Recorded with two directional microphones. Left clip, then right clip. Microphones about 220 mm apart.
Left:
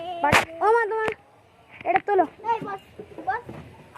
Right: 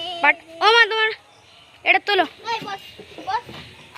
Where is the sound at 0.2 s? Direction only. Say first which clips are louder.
Right 2 dB; 15° right (ahead or behind).